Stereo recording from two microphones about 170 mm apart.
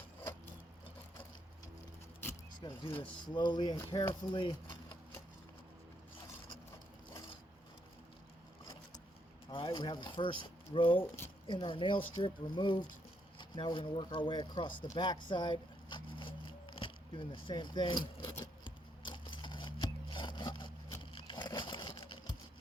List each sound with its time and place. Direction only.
2.6 s speech: 30° left (ahead or behind)
9.5 s speech: 30° left (ahead or behind)
14.9 s a sound: 25° left (ahead or behind)
16.7 s speech: 30° left (ahead or behind)
18.6 s rub: 30° left (ahead or behind)
21.0 s a sound: 30° left (ahead or behind)